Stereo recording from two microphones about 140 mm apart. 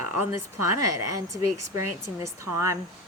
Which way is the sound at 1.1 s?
25° right (ahead or behind).